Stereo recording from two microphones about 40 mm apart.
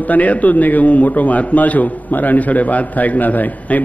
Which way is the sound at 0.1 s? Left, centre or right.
Left.